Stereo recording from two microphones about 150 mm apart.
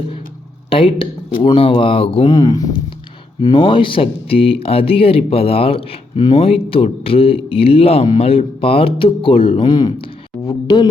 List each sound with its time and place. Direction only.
0.7 s speech: 35° left (ahead or behind)
2.3 s speech: 25° left (ahead or behind)
3.4 s speech: 35° left (ahead or behind)